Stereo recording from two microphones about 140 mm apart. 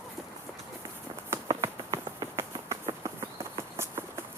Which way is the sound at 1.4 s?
25° right (ahead or behind).